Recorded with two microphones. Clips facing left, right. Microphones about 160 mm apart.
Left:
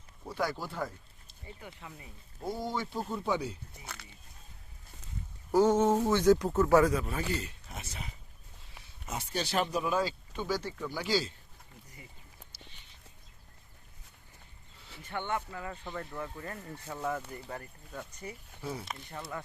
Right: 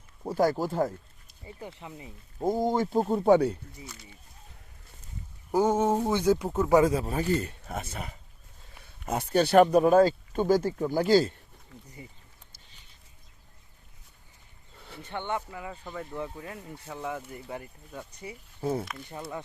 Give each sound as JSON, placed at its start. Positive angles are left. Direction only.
{"t": 0.3, "sound": "speech", "side_deg": -45}
{"t": 1.5, "sound": "speech", "side_deg": -25}
{"t": 2.4, "sound": "speech", "side_deg": -45}
{"t": 3.3, "sound": "speech", "side_deg": -60}
{"t": 3.9, "sound": "speech", "side_deg": 60}
{"t": 5.5, "sound": "speech", "side_deg": -10}
{"t": 6.9, "sound": "speech", "side_deg": -35}
{"t": 7.3, "sound": "speech", "side_deg": -55}
{"t": 14.8, "sound": "a sound", "side_deg": -55}
{"t": 15.1, "sound": "speech", "side_deg": -20}
{"t": 16.1, "sound": "speech", "side_deg": -15}
{"t": 18.6, "sound": "speech", "side_deg": -50}